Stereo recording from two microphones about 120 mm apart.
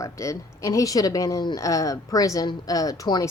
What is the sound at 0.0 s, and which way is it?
Speech, 25° left (ahead or behind).